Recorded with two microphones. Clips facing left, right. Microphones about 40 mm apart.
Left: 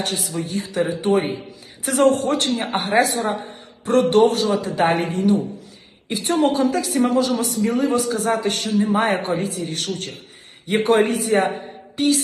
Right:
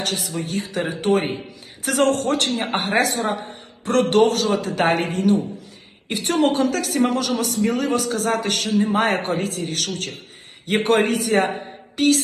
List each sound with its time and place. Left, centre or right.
0.0 s a man's voice: right
1.2 s a man's voice: centre
1.8 s a man's voice: right